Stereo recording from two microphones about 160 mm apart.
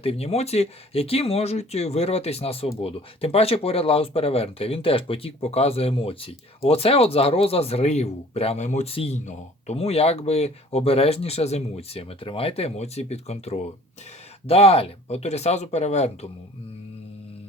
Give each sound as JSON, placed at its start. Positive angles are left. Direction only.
{"t": 0.0, "sound": "speech", "side_deg": 40}